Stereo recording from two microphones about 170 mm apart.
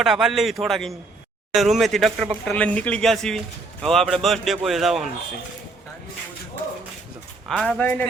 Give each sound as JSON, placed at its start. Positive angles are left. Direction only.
{"t": 0.0, "sound": "a man's voice", "side_deg": 0}
{"t": 7.4, "sound": "speech", "side_deg": 5}